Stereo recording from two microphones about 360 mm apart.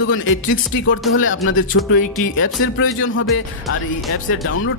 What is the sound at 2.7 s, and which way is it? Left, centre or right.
Speech, left.